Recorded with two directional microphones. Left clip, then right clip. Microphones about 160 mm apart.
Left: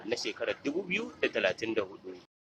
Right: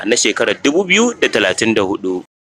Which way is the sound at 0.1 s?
45° right (ahead or behind).